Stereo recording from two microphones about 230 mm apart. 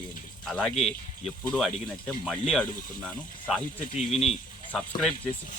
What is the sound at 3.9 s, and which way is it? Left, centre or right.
Speech, left.